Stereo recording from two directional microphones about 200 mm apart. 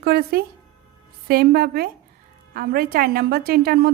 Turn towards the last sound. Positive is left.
turn(degrees=-50)  # may be behind; listen again after turning